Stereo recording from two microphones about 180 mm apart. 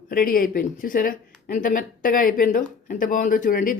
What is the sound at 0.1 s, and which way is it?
Speech, 50° left (ahead or behind).